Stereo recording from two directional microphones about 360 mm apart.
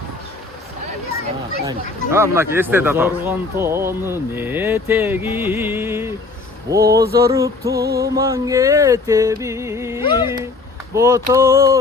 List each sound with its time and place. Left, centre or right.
1.6 s speech: centre
7.8 s music: right
8.0 s speech: centre
10.0 s speech: centre
10.9 s speech: centre